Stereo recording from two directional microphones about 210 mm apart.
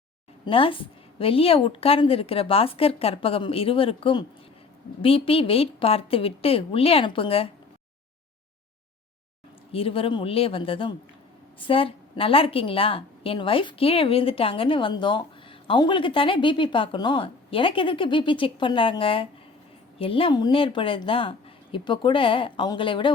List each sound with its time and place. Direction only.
0.4 s a woman's voice: 25° left (ahead or behind)
9.7 s a woman's voice: 25° left (ahead or behind)